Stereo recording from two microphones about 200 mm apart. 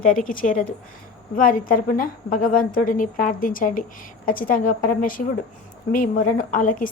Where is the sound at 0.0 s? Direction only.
45° left (ahead or behind).